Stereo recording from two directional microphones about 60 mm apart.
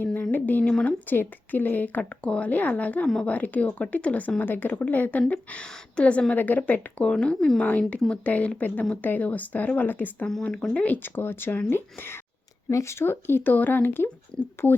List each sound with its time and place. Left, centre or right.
0.0 s a sound: left
0.6 s speech: centre
1.1 s speech: left
7.1 s a woman's voice: centre; by 12.1 s left
12.7 s a woman's voice: left